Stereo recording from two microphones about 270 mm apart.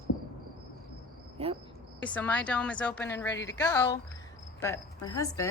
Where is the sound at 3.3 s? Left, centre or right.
Left.